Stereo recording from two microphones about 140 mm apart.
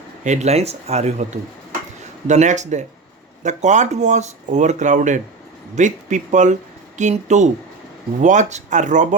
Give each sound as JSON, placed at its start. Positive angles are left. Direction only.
{"t": 0.3, "sound": "speech", "side_deg": -50}